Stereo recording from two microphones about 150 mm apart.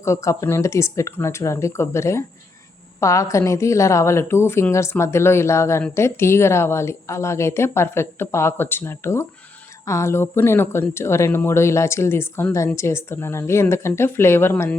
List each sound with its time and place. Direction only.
0.0 s a woman's voice: 20° left (ahead or behind)